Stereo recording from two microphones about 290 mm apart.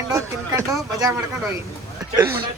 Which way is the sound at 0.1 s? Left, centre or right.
Centre.